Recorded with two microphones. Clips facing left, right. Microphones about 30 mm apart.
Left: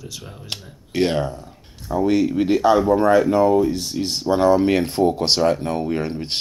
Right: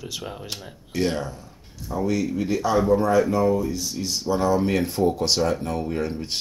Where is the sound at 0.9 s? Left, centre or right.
Left.